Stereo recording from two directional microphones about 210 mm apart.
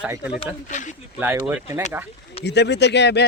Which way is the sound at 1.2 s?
10° right (ahead or behind).